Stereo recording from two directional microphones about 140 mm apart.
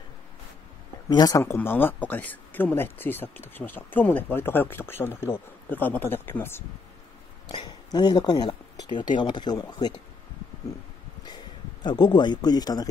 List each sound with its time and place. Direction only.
1.0 s speech: 25° left (ahead or behind)
7.4 s speech: 35° left (ahead or behind)
11.2 s speech: 30° left (ahead or behind)